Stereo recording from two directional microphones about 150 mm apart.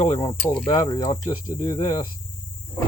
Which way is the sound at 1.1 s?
55° left (ahead or behind).